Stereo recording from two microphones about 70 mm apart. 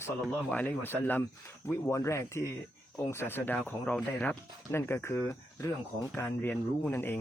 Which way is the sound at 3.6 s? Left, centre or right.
Centre.